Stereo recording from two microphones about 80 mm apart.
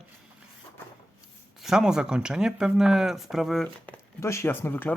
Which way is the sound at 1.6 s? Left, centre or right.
Centre.